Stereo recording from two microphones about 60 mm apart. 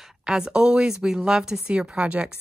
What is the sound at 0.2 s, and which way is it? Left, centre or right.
A woman's voice, centre.